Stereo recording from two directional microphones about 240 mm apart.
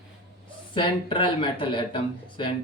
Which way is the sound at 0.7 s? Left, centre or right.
Left.